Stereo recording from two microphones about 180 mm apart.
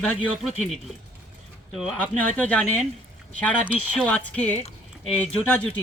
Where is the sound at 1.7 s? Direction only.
Centre (ahead or behind).